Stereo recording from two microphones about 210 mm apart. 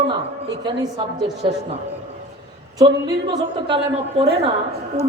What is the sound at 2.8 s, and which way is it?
A woman's voice, 20° right (ahead or behind).